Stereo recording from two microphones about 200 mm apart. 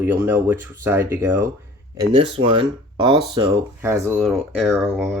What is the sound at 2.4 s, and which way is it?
Speech, 25° right (ahead or behind).